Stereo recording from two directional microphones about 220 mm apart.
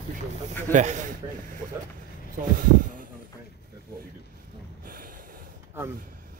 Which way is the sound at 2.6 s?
40° right (ahead or behind).